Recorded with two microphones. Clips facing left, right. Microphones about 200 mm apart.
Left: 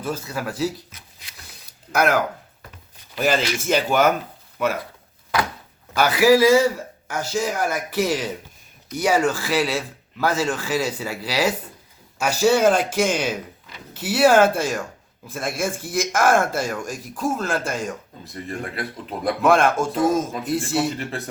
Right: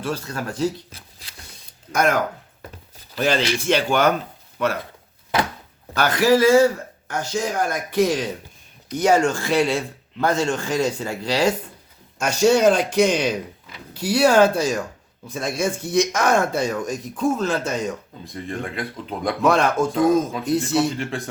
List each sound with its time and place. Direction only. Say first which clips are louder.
0.0 s speech: even; 5° left (ahead or behind)
0.9 s a sound: right 3 dB; 30° right (ahead or behind)
1.9 s speech: even; 5° left (ahead or behind)
3.2 s speech: even; 5° left (ahead or behind)
6.0 s speech: left 1 dB; 10° left (ahead or behind)